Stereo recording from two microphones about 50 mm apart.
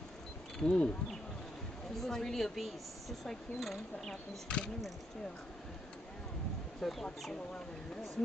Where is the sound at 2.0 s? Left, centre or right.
Centre.